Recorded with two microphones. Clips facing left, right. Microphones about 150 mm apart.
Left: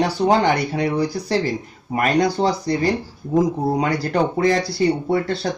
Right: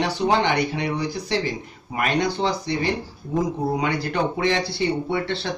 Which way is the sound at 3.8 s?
40° left (ahead or behind).